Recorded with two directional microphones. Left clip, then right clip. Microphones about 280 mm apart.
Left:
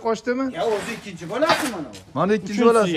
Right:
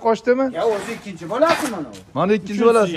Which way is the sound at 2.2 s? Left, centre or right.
Centre.